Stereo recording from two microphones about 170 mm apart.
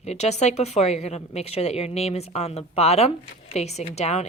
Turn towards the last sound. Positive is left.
turn(degrees=40)  # may be behind; listen again after turning